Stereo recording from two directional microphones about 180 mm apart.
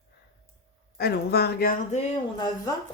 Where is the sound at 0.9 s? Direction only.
60° left (ahead or behind).